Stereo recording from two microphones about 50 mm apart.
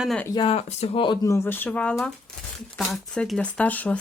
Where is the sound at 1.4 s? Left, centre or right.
Left.